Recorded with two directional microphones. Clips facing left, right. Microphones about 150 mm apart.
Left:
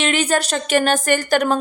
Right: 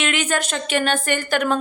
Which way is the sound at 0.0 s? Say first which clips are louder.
Left 4 dB; 35° left (ahead or behind).